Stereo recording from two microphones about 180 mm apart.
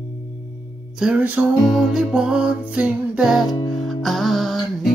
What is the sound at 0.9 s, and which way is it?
Music, 5° right (ahead or behind).